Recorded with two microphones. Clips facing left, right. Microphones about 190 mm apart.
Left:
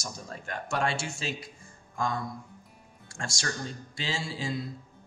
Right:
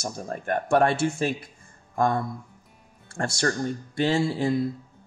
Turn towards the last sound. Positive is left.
turn(degrees=-60)  # may be behind; listen again after turning